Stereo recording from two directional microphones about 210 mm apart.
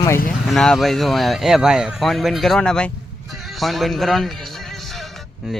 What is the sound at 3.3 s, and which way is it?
Music, centre (ahead or behind).